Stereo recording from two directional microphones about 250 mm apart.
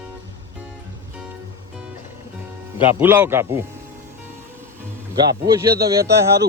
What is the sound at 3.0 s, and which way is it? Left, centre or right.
Speech, centre.